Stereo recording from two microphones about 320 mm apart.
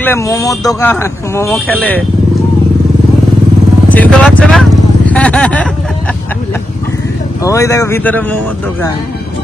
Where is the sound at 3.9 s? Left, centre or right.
Centre.